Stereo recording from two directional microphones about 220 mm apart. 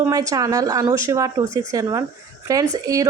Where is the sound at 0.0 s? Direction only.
15° right (ahead or behind).